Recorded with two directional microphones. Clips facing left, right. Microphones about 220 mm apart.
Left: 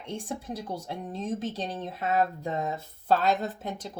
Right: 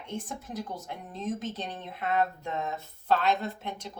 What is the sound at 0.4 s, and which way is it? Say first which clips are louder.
Speech: left 2 dB; 35° left (ahead or behind).